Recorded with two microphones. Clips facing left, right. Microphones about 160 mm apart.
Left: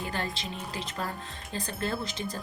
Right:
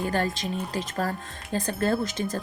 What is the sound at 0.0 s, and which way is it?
Speech, 45° right (ahead or behind).